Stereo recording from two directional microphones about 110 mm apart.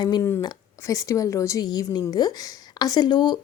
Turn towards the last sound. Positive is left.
turn(degrees=40)  # may be behind; listen again after turning